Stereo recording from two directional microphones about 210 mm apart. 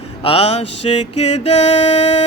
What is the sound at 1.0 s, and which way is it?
Music, 90° left.